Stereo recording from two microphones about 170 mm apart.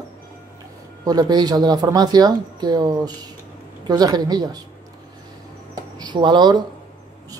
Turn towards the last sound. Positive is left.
turn(degrees=-25)  # may be behind; listen again after turning